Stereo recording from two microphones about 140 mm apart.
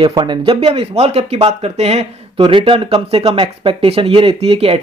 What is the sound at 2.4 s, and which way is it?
Speech, 35° right (ahead or behind).